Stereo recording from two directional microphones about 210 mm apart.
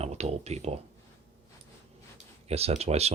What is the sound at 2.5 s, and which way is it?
Speech, 30° right (ahead or behind).